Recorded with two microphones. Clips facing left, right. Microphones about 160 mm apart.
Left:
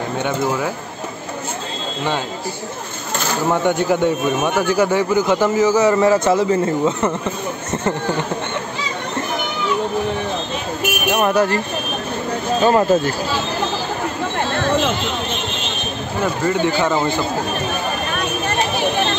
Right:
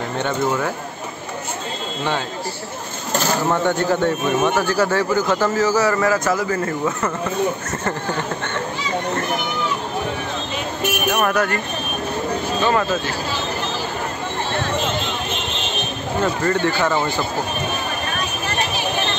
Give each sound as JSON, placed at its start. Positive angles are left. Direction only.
{"t": 3.4, "sound": "speech", "side_deg": 15}
{"t": 11.1, "sound": "speech", "side_deg": 20}
{"t": 12.6, "sound": "speech", "side_deg": 40}
{"t": 16.2, "sound": "speech", "side_deg": 15}